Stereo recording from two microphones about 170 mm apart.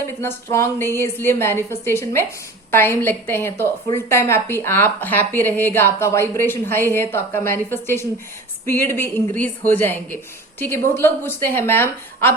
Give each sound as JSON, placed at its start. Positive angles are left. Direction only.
{"t": 0.2, "sound": "a woman's voice", "side_deg": 15}